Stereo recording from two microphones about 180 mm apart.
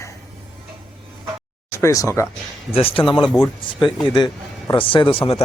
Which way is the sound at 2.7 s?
30° left (ahead or behind).